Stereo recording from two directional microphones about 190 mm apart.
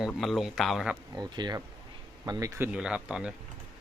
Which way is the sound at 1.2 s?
20° right (ahead or behind).